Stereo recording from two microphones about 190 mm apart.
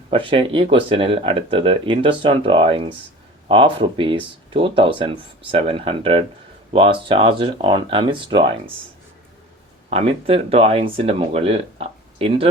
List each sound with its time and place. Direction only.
0.1 s speech: 25° right (ahead or behind)
9.9 s speech: 30° right (ahead or behind)